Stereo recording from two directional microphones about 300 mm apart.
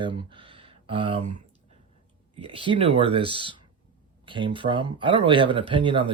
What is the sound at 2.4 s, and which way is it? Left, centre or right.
Speech, centre.